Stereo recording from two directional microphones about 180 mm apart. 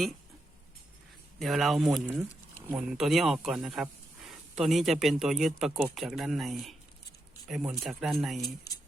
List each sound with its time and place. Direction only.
1.4 s speech: centre (ahead or behind)